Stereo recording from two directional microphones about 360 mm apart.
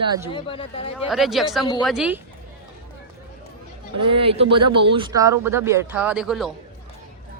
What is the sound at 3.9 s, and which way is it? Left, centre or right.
Speech, centre.